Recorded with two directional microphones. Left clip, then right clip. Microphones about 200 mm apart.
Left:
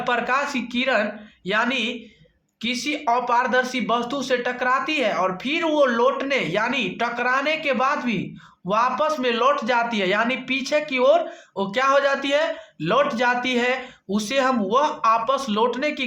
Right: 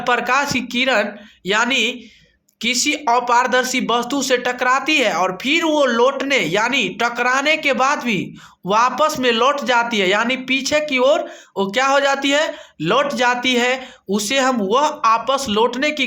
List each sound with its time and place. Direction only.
0.0 s a man's voice: 25° right (ahead or behind)